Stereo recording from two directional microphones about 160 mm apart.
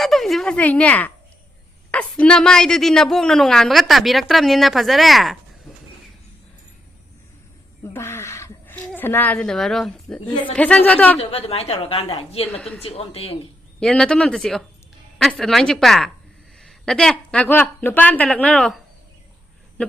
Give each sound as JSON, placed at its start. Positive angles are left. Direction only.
{"t": 0.0, "sound": "a woman's voice", "side_deg": 0}
{"t": 7.9, "sound": "a sound", "side_deg": 15}
{"t": 9.0, "sound": "a man's voice", "side_deg": 10}
{"t": 11.2, "sound": "a woman's voice", "side_deg": 40}
{"t": 12.5, "sound": "a man's voice", "side_deg": 5}
{"t": 12.8, "sound": "a woman's voice", "side_deg": 40}
{"t": 13.7, "sound": "a man's voice", "side_deg": 5}